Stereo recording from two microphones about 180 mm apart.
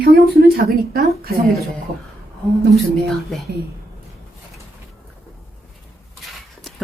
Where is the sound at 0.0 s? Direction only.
60° right (ahead or behind).